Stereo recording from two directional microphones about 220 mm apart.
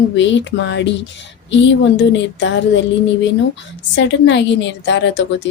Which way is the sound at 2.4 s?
55° left (ahead or behind).